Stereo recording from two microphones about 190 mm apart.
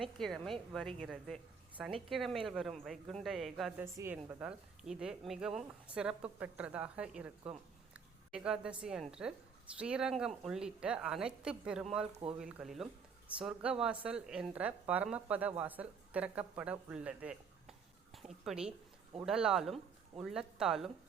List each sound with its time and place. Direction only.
0.0 s a woman's voice: centre (ahead or behind)
3.9 s a woman's voice: 15° right (ahead or behind)